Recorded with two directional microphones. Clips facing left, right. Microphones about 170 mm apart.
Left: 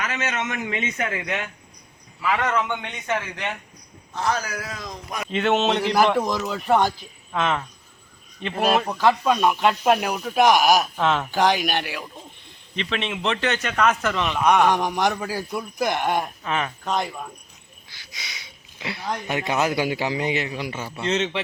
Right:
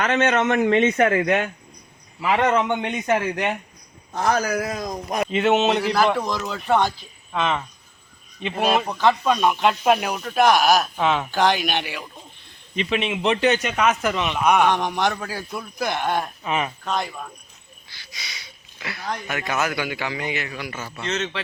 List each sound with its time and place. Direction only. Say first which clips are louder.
0.0 s a man's voice: right 8 dB; 60° right (ahead or behind)
0.9 s speech: right 9 dB; 45° right (ahead or behind)
2.2 s a man's voice: right 4 dB; 25° right (ahead or behind)
4.1 s speech: right 4 dB; 45° right (ahead or behind)
5.3 s speech: right 1 dB; 5° right (ahead or behind)
6.1 s speech: left 2 dB; 10° left (ahead or behind)
10.9 s speech: right 1 dB; centre (ahead or behind)
11.3 s speech: even; 10° left (ahead or behind)
12.7 s a man's voice: right 4 dB; 15° right (ahead or behind)
14.7 s a man's voice: even; 10° left (ahead or behind)
16.4 s a man's voice: right 1 dB; 10° right (ahead or behind)
16.8 s a man's voice: left 1 dB; 15° left (ahead or behind)
18.8 s a man's voice: left 1 dB; 20° left (ahead or behind)